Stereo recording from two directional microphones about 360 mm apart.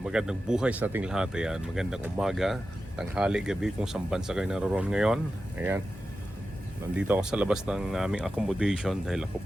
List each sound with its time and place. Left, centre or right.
0.0 s speech: centre
6.9 s speech: centre